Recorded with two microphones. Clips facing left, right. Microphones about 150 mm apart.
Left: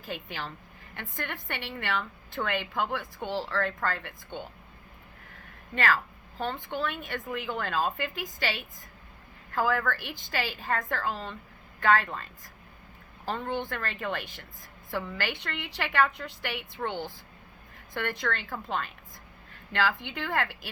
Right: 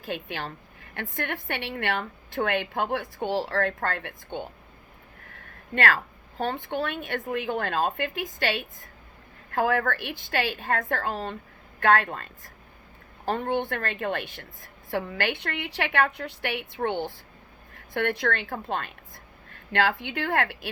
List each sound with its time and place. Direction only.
0.0 s a woman's voice: 60° right (ahead or behind)
5.7 s a woman's voice: 60° right (ahead or behind)
13.2 s a woman's voice: 55° right (ahead or behind)
20.1 s a woman's voice: 60° right (ahead or behind)